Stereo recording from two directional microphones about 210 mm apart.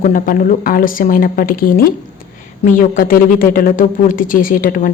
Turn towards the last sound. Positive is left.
turn(degrees=40)  # may be behind; listen again after turning